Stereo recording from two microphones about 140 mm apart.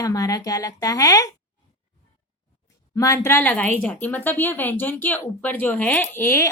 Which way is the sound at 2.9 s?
20° left (ahead or behind).